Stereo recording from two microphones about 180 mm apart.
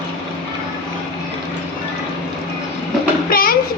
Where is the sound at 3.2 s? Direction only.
55° left (ahead or behind).